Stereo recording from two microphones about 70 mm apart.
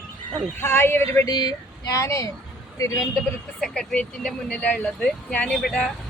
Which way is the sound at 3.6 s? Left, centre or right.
Centre.